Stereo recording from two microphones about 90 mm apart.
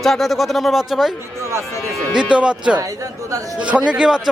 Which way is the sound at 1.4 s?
30° right (ahead or behind).